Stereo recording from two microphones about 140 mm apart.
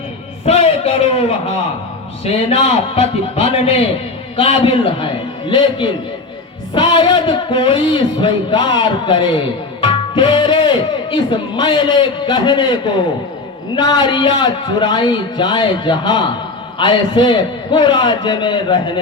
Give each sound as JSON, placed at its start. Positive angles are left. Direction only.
{"t": 0.4, "sound": "a man's voice", "side_deg": 45}